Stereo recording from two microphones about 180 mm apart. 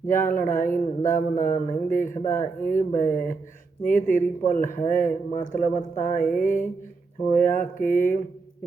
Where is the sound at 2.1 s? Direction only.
15° left (ahead or behind).